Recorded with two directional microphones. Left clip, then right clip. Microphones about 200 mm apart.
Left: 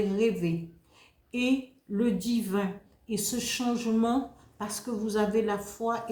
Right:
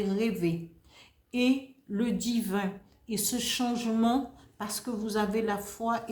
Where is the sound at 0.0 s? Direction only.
40° right (ahead or behind).